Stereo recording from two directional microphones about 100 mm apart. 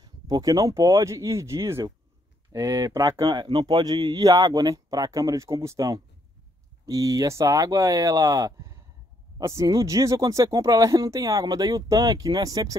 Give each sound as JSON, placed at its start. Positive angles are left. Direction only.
{"t": 0.0, "sound": "speech", "side_deg": -40}
{"t": 3.3, "sound": "speech", "side_deg": -55}